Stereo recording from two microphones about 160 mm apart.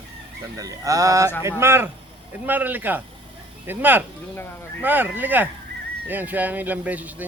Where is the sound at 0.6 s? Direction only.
20° right (ahead or behind).